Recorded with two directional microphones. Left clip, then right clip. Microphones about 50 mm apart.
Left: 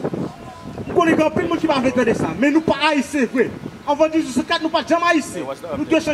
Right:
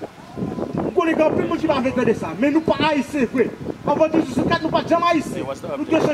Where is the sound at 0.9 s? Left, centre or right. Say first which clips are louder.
Left 2 dB; left.